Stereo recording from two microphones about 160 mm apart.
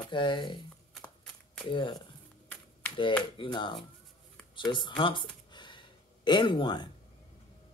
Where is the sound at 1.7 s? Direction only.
30° left (ahead or behind).